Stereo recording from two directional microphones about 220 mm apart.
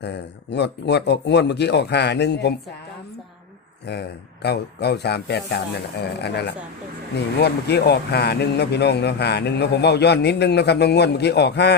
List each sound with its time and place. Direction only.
0.0 s speech: 50° left (ahead or behind)
4.4 s speech: 50° left (ahead or behind)
7.3 s speech: 50° left (ahead or behind)